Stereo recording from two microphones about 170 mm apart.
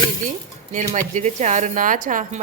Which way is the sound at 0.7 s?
45° right (ahead or behind).